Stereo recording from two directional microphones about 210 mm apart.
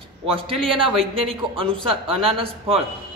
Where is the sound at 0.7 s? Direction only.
25° right (ahead or behind).